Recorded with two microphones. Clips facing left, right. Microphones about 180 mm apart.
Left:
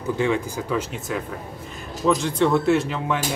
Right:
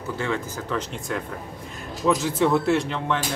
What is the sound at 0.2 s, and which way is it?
Speech, 10° left (ahead or behind).